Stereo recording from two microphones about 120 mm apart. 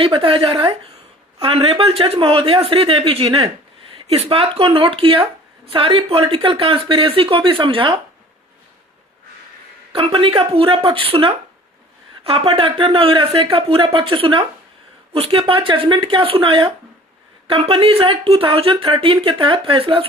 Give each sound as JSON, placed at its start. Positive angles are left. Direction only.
{"t": 0.0, "sound": "speech", "side_deg": -50}
{"t": 9.9, "sound": "speech", "side_deg": -50}